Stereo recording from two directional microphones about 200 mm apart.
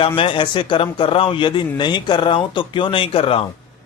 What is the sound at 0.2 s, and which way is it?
Speech, 25° left (ahead or behind).